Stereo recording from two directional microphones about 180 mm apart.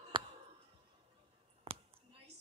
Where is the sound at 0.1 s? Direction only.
25° right (ahead or behind).